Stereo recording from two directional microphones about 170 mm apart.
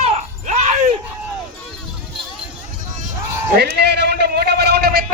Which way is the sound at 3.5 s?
75° right (ahead or behind).